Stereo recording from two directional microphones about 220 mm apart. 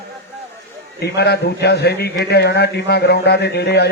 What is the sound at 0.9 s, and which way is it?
A man's voice, 45° left (ahead or behind).